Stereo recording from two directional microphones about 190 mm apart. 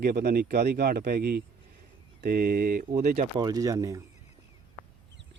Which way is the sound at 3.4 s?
20° right (ahead or behind).